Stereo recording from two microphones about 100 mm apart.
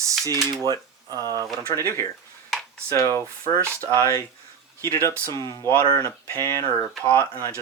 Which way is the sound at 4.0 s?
30° left (ahead or behind).